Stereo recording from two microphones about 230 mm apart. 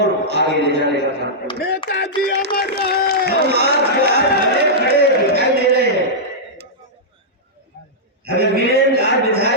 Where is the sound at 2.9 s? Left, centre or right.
Left.